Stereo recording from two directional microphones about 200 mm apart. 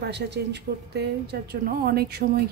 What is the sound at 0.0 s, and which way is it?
A woman's voice, 55° right (ahead or behind).